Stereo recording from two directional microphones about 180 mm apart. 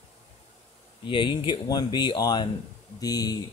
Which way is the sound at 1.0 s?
25° left (ahead or behind).